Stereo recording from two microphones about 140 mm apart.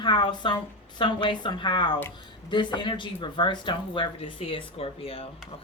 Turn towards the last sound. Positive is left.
turn(degrees=45)  # may be behind; listen again after turning